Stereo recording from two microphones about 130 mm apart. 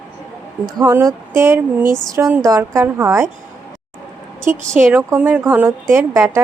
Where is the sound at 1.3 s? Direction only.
20° right (ahead or behind).